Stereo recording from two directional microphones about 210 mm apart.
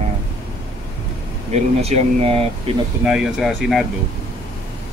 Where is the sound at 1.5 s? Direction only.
30° right (ahead or behind).